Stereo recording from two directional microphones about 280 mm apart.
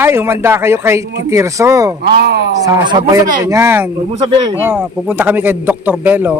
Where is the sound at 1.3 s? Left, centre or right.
Centre.